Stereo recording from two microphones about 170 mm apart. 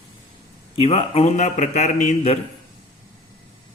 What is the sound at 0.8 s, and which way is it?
Speech, 35° left (ahead or behind).